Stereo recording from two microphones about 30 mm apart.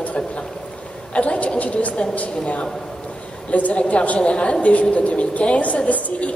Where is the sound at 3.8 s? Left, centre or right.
Left.